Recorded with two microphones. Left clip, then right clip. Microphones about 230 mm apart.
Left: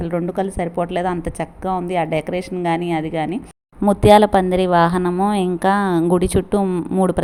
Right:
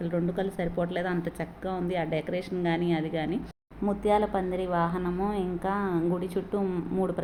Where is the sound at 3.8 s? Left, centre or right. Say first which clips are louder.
Left 14 dB; left.